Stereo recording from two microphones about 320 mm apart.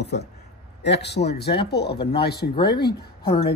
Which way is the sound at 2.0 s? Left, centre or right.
Centre.